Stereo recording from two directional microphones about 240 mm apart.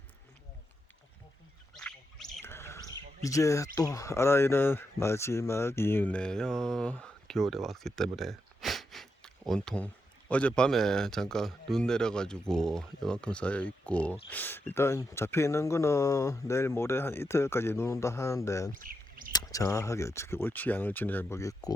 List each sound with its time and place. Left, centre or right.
1.7 s goat: centre
3.2 s speech: centre
18.8 s a sound: right
19.3 s speech: centre